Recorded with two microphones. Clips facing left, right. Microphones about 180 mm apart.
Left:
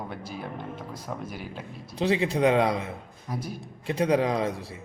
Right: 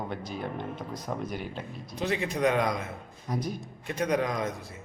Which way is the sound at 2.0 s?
30° left (ahead or behind).